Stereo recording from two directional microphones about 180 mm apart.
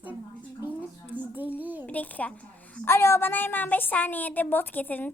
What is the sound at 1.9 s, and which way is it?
A woman's voice, 10° left (ahead or behind).